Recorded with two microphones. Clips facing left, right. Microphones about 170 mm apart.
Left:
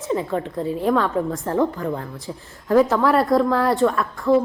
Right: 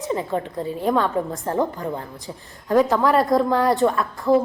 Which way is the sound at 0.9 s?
20° right (ahead or behind).